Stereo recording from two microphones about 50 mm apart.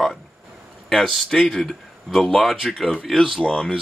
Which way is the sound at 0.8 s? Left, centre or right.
Centre.